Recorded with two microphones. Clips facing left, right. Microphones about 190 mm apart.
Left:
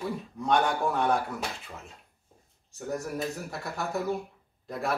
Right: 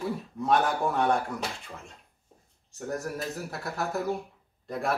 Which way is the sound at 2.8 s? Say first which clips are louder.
Left 1 dB; centre (ahead or behind).